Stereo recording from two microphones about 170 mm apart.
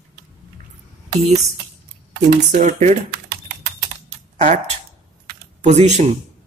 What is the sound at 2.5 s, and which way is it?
Speech, 45° right (ahead or behind).